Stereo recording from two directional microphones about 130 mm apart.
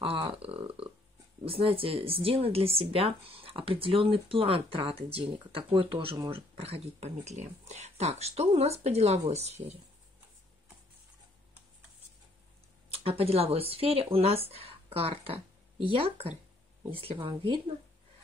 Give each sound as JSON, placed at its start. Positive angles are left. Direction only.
{"t": 0.0, "sound": "a sound", "side_deg": -45}
{"t": 1.4, "sound": "speech", "side_deg": -45}
{"t": 6.3, "sound": "speech", "side_deg": -50}
{"t": 12.9, "sound": "speech", "side_deg": -50}